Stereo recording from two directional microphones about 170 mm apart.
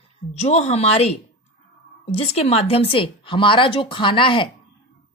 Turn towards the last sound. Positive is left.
turn(degrees=30)  # may be behind; listen again after turning